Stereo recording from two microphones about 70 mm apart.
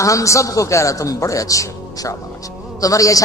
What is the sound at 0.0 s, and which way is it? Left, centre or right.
A man's voice, left.